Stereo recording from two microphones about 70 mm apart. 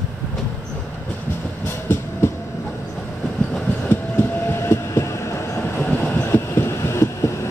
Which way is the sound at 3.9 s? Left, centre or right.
Left.